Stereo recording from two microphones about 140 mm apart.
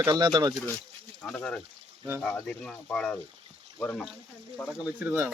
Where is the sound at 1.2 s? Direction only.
5° left (ahead or behind).